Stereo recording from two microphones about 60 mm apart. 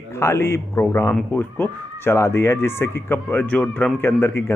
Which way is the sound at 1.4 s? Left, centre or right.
Left.